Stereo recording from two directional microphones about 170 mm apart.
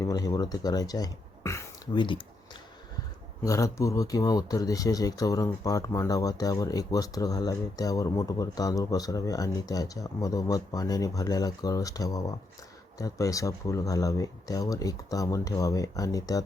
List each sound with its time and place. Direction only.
0.0 s speech: 20° left (ahead or behind)